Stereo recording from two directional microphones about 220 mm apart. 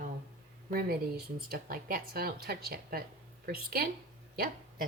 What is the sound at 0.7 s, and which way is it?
Speech, 45° right (ahead or behind).